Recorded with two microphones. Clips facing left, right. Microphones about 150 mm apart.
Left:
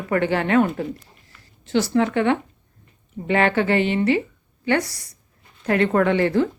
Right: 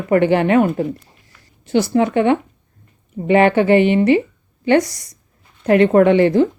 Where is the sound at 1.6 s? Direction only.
15° right (ahead or behind).